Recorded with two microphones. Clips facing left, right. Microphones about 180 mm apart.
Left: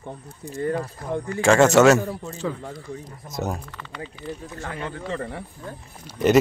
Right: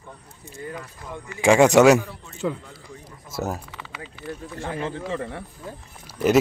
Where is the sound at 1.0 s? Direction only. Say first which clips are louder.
Left 9 dB; 55° left (ahead or behind).